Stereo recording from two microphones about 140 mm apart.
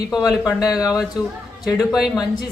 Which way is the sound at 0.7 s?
25° left (ahead or behind).